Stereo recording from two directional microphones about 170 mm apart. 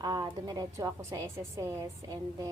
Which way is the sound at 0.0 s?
25° right (ahead or behind).